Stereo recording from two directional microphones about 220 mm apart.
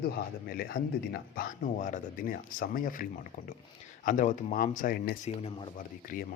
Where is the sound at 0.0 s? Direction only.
45° left (ahead or behind).